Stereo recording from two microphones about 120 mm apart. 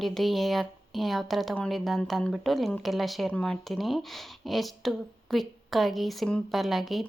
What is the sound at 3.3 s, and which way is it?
Speech, 10° left (ahead or behind).